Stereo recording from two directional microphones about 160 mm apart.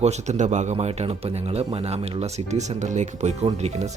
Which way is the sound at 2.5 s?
45° right (ahead or behind).